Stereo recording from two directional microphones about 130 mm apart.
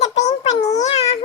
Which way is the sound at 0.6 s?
30° left (ahead or behind).